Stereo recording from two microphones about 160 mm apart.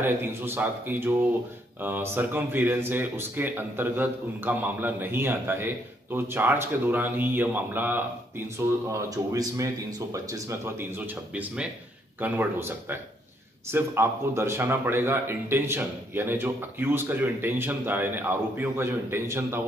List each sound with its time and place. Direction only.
0.0 s speech: 15° right (ahead or behind)
9.1 s speech: 20° right (ahead or behind)
11.3 s speech: 5° right (ahead or behind)